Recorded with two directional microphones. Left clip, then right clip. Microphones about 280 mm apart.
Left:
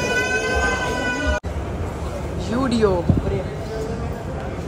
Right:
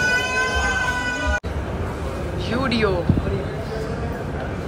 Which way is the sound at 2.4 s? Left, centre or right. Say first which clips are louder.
Left 2 dB; centre.